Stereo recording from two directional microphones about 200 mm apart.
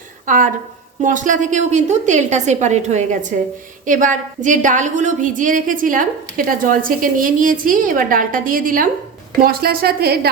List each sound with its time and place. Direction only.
0.3 s a woman's voice: 40° right (ahead or behind)